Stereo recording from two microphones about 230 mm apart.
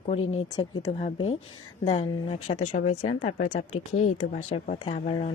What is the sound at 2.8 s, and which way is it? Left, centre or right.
Speech, left.